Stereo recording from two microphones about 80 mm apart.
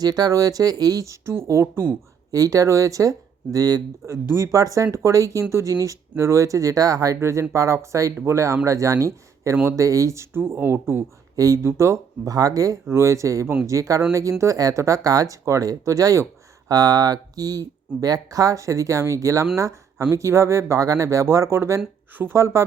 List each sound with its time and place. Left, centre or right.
0.0 s speech: right
2.3 s speech: right
11.3 s speech: right